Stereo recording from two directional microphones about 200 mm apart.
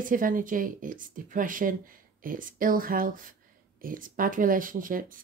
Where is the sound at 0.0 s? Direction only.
45° right (ahead or behind).